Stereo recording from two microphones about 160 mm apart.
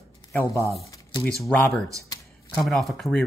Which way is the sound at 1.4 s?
5° left (ahead or behind).